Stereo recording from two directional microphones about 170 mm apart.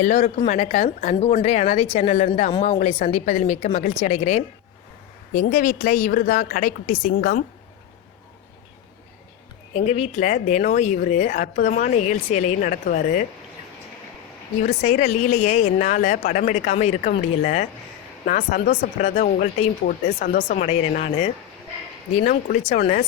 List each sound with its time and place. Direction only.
0.0 s a woman's voice: 45° left (ahead or behind)
9.7 s a woman's voice: 40° left (ahead or behind); by 13.2 s 55° left (ahead or behind)
14.8 s a woman's voice: 45° left (ahead or behind)
22.2 s a woman's voice: 55° left (ahead or behind)